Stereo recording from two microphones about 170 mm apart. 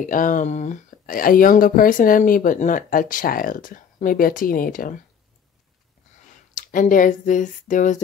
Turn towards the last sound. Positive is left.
turn(degrees=50)  # may be behind; listen again after turning